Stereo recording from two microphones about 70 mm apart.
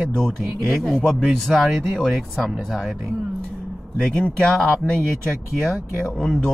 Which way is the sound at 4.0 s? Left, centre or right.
Centre.